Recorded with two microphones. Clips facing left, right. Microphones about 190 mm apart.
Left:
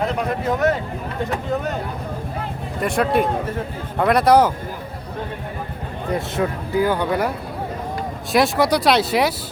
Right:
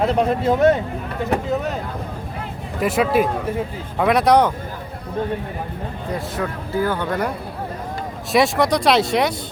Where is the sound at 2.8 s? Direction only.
Centre (ahead or behind).